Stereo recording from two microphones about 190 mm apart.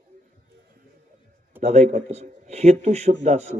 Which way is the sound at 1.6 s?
35° right (ahead or behind).